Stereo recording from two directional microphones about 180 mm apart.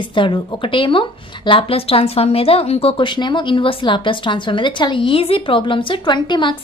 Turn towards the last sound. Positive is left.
turn(degrees=25)  # may be behind; listen again after turning